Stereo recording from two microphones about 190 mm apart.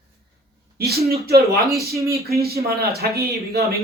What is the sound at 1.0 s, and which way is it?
Speech, 55° right (ahead or behind).